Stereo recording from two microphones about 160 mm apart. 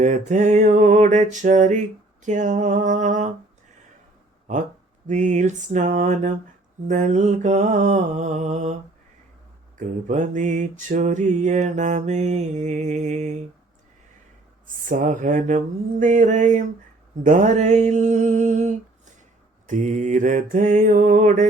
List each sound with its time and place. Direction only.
0.0 s mantra: 50° right (ahead or behind)
5.0 s mantra: 50° right (ahead or behind)
9.7 s mantra: 50° right (ahead or behind)
14.7 s mantra: 55° right (ahead or behind)